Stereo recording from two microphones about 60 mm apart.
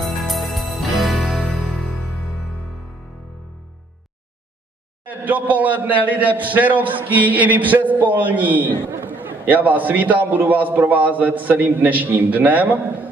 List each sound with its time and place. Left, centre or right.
0.0 s music: centre
5.0 s a man's voice: right